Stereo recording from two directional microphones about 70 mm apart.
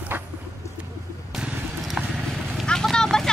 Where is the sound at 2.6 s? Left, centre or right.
Centre.